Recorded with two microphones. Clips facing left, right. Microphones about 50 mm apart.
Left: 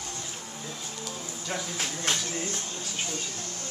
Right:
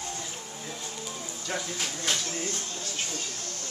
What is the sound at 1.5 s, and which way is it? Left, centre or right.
Speech, centre.